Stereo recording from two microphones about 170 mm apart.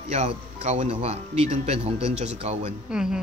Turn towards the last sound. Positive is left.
turn(degrees=-5)  # may be behind; listen again after turning